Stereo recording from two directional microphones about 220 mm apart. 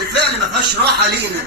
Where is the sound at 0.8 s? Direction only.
45° right (ahead or behind).